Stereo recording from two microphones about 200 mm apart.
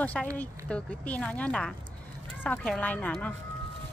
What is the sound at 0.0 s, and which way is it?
A woman's voice, 5° left (ahead or behind).